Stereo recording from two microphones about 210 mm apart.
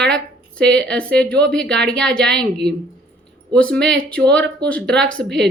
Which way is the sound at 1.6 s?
55° right (ahead or behind).